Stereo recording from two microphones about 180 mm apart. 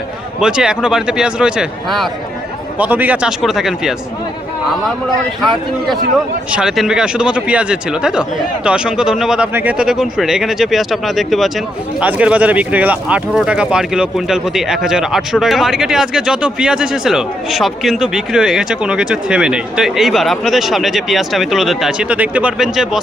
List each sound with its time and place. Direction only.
0.3 s speech: 5° right (ahead or behind)
5.4 s speech: centre (ahead or behind)